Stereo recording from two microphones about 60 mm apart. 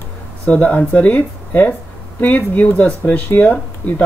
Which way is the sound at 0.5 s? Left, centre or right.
Left.